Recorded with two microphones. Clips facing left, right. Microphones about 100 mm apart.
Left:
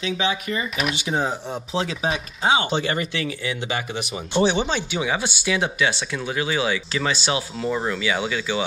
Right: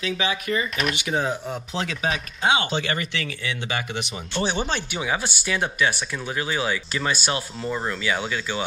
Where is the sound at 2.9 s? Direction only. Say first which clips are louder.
Left 3 dB; 25° left (ahead or behind).